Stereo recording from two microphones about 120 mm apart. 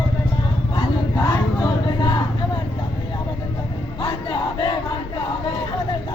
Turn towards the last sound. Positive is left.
turn(degrees=40)  # may be behind; listen again after turning